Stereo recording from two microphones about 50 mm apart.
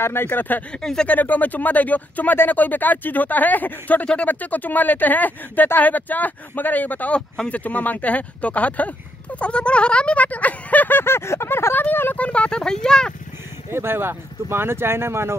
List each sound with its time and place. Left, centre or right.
0.0 s speech: left
0.7 s speech: centre
1.0 s speech: left
7.2 s speech: left
12.2 s speech: left
13.7 s speech: right